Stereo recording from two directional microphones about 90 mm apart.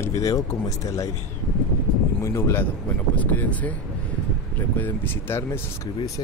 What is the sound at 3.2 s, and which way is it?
Speech, 15° left (ahead or behind).